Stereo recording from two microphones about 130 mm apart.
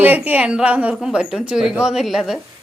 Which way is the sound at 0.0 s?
10° right (ahead or behind).